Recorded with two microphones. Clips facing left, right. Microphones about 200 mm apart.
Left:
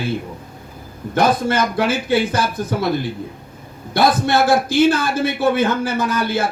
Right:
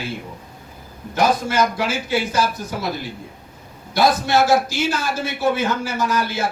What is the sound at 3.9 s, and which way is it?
Speech, 55° left (ahead or behind).